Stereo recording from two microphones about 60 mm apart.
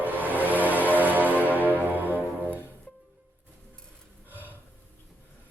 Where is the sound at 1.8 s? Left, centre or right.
Right.